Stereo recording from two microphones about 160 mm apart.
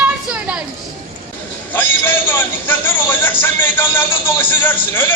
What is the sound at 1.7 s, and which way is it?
A man's voice, 10° left (ahead or behind).